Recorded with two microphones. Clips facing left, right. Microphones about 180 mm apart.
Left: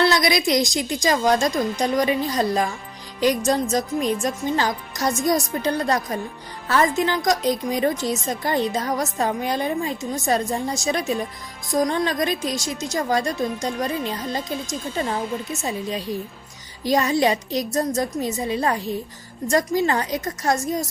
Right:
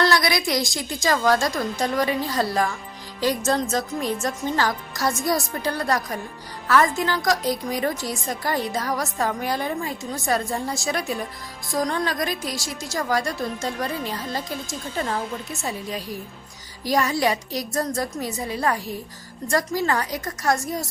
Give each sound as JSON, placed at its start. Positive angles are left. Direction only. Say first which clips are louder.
{"t": 0.0, "sound": "a woman's voice", "louder": "left 2 dB", "side_deg": 20}